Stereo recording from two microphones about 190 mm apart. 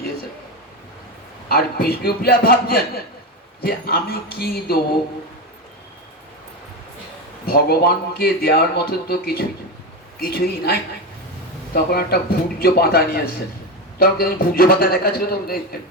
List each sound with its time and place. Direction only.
1.5 s speech: 50° left (ahead or behind)
7.4 s speech: 55° left (ahead or behind)